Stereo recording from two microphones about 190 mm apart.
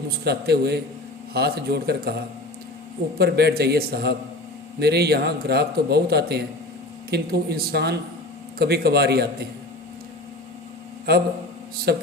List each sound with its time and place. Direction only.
0.3 s a man's voice: 60° right (ahead or behind)
11.9 s a man's voice: 60° right (ahead or behind)